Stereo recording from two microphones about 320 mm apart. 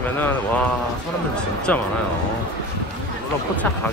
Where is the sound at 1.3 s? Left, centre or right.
Centre.